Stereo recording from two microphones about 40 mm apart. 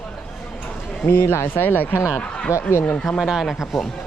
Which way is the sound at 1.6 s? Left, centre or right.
Left.